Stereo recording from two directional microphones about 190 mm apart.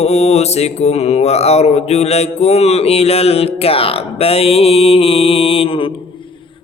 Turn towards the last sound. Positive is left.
turn(degrees=30)  # may be behind; listen again after turning